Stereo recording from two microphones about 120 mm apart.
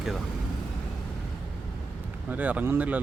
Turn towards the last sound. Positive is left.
turn(degrees=-15)  # may be behind; listen again after turning